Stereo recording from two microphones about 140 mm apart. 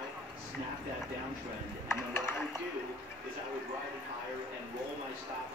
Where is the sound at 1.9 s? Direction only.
15° left (ahead or behind).